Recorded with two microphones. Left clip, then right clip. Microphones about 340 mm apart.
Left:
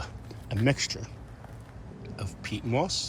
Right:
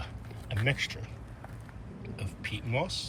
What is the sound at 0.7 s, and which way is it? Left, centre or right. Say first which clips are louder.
Speech: left 2 dB; centre.